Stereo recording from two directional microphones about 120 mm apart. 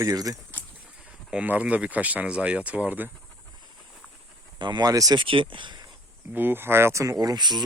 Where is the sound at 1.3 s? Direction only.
10° right (ahead or behind).